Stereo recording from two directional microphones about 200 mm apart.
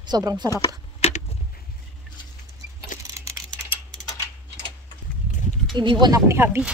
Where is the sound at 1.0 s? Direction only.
35° left (ahead or behind).